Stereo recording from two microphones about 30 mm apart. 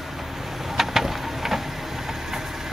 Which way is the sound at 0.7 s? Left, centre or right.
Centre.